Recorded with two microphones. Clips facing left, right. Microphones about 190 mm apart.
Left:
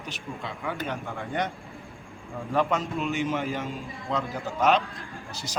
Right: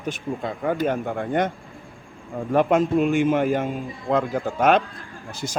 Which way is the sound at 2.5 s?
55° right (ahead or behind).